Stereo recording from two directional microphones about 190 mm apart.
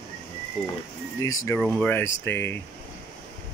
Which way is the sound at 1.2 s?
15° left (ahead or behind).